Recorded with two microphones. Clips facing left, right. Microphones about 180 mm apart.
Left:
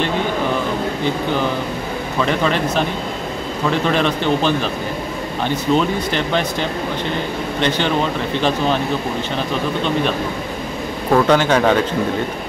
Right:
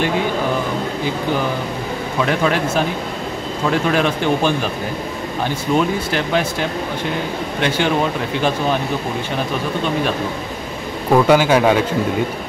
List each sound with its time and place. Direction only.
2.2 s speech: 5° right (ahead or behind)
7.6 s speech: 10° right (ahead or behind)
11.1 s speech: 10° right (ahead or behind)